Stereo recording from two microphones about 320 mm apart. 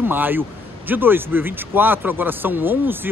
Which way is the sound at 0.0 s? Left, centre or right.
Centre.